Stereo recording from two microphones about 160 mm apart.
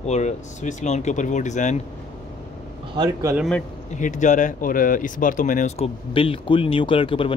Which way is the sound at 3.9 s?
50° left (ahead or behind).